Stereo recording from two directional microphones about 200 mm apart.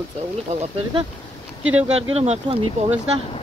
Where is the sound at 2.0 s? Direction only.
30° right (ahead or behind).